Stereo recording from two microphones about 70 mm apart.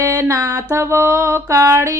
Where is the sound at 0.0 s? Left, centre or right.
Right.